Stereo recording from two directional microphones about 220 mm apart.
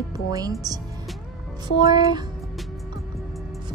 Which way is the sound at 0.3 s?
15° right (ahead or behind).